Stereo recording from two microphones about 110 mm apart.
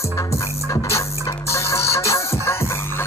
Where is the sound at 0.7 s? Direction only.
25° left (ahead or behind).